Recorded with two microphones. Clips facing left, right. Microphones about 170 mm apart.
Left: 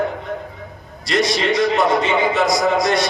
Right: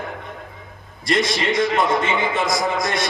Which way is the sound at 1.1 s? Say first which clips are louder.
Left 2 dB; 50° right (ahead or behind).